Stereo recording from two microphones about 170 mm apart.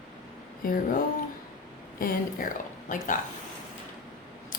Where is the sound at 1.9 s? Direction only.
55° left (ahead or behind).